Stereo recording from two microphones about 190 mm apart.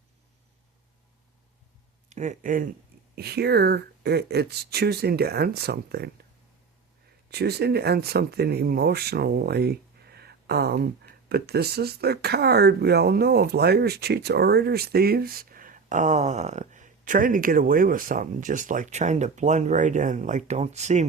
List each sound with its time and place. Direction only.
2.0 s speech: 40° right (ahead or behind)
3.2 s speech: 55° right (ahead or behind)
7.3 s speech: 55° right (ahead or behind); by 21.1 s 35° right (ahead or behind)